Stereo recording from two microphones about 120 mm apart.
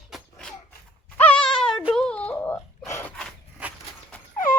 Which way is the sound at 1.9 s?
5° left (ahead or behind).